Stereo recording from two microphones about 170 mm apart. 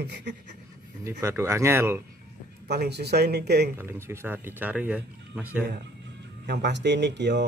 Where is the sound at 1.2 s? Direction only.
15° right (ahead or behind).